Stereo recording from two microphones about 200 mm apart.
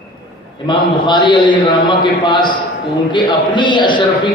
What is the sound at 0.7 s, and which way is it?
A man's voice, 25° left (ahead or behind).